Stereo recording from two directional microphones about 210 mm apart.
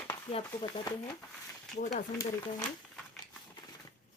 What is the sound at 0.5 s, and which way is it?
Speech, 15° left (ahead or behind).